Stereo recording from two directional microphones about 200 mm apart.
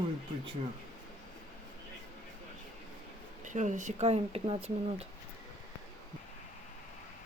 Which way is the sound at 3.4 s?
35° right (ahead or behind).